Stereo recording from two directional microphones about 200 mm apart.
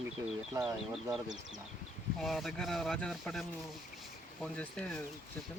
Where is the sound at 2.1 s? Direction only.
Centre (ahead or behind).